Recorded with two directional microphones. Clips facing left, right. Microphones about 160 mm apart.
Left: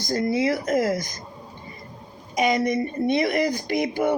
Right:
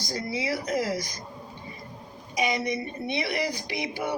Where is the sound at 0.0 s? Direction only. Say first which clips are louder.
Left 8 dB; 50° left (ahead or behind).